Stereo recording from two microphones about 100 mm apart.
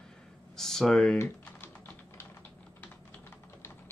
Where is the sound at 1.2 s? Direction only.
25° left (ahead or behind).